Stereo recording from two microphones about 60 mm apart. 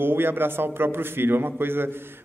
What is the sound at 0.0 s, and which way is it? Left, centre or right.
A man's voice, right.